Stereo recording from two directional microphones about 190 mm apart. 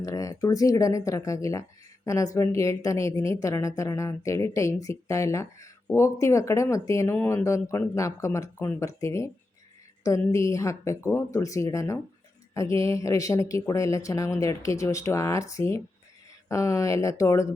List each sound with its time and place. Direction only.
0.0 s a woman's voice: 15° left (ahead or behind)